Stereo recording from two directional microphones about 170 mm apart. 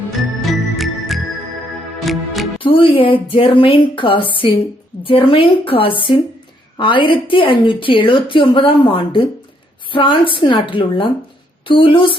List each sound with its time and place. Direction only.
0.8 s music: centre (ahead or behind)
2.6 s a woman's voice: 30° left (ahead or behind)